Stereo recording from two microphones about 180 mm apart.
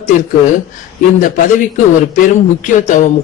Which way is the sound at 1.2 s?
45° left (ahead or behind).